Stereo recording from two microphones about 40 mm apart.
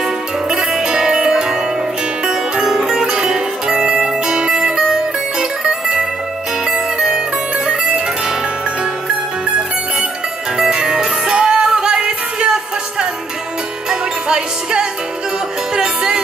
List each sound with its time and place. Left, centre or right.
0.5 s music: centre
6.7 s zither: centre
7.6 s music: right
10.7 s music: centre
13.8 s music: centre